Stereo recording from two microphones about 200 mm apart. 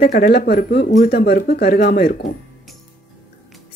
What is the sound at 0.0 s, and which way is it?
Speech, 45° left (ahead or behind).